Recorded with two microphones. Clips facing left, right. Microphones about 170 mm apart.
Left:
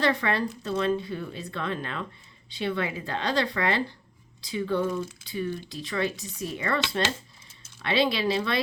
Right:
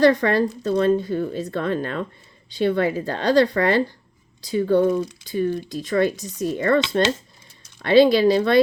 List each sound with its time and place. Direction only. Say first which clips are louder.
0.0 s a woman's voice: right 9 dB; 45° right (ahead or behind)